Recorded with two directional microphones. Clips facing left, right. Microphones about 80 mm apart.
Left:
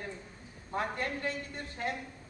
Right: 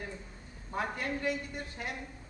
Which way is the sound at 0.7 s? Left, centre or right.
Centre.